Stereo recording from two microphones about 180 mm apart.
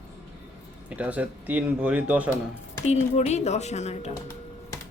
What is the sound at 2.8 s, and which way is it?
A woman's voice, 40° left (ahead or behind).